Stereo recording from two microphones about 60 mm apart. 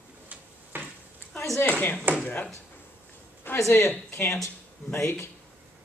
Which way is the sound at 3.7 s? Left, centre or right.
Left.